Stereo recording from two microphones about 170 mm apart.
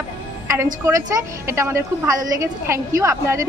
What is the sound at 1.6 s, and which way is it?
A woman's voice, 15° right (ahead or behind).